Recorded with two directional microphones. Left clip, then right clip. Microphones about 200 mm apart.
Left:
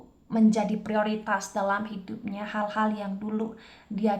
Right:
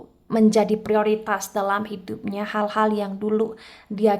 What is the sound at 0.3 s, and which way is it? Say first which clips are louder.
A woman's voice: right 7 dB; 45° right (ahead or behind).